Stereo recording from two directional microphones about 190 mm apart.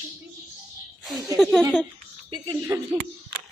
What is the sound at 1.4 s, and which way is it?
Speech, centre (ahead or behind).